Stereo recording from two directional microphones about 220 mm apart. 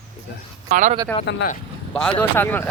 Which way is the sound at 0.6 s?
35° right (ahead or behind).